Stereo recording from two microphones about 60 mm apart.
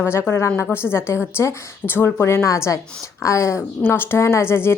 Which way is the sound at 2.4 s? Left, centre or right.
Left.